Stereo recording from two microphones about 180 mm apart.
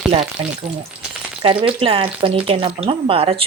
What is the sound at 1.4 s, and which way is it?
Speech, 30° right (ahead or behind).